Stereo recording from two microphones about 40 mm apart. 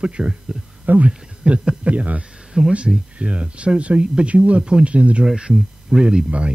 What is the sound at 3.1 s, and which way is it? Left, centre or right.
Speech, right.